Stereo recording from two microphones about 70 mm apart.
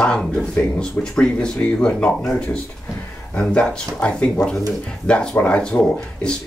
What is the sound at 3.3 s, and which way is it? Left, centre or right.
Speech, centre.